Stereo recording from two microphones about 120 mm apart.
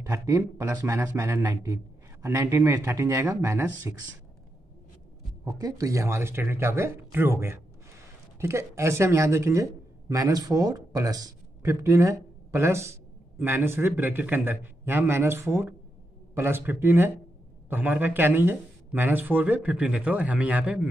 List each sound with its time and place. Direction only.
0.0 s a man's voice: 25° right (ahead or behind)
5.4 s a man's voice: 30° right (ahead or behind); by 20.9 s 10° right (ahead or behind)